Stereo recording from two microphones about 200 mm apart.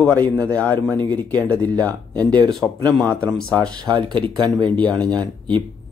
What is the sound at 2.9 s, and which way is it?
Speech, 5° left (ahead or behind).